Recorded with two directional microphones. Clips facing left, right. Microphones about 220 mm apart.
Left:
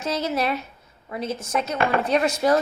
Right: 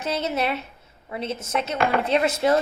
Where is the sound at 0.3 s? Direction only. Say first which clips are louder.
Left 1 dB; 25° right (ahead or behind).